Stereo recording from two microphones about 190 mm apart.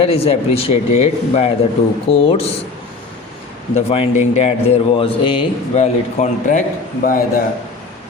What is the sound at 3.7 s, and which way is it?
Speech, 35° left (ahead or behind).